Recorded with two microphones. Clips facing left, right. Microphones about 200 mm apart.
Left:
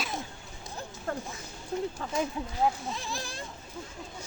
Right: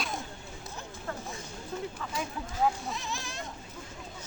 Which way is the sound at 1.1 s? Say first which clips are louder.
Left 3 dB; 40° left (ahead or behind).